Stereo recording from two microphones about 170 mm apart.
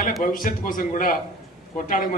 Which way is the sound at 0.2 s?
55° left (ahead or behind).